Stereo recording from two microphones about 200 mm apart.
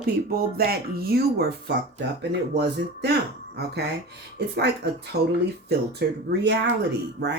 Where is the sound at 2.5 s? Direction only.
55° right (ahead or behind).